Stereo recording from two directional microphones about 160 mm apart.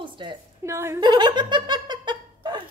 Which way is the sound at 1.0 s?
25° right (ahead or behind).